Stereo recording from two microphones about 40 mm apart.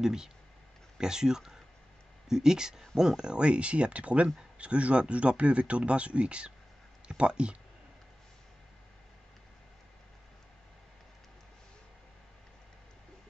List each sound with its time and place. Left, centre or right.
0.0 s speech: centre